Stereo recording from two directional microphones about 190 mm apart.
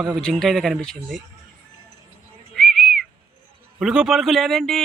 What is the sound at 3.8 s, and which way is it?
Speech, 5° right (ahead or behind).